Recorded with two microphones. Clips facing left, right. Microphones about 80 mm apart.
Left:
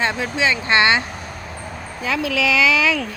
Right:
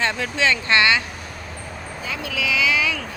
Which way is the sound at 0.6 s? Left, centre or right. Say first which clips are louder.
Left 3 dB; left.